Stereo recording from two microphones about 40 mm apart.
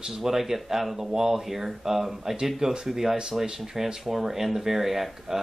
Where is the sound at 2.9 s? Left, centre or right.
Centre.